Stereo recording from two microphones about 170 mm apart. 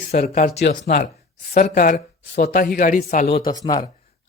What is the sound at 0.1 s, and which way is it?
Speech, 55° left (ahead or behind).